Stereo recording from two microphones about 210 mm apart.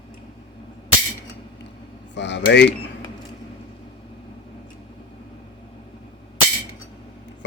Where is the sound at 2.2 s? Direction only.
55° left (ahead or behind).